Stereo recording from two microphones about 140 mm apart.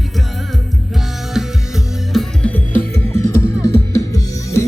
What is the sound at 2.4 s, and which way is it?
Music, 10° left (ahead or behind).